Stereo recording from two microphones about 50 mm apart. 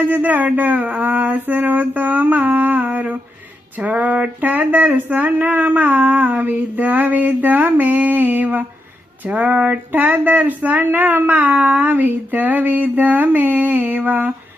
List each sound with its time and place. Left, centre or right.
0.1 s speech: right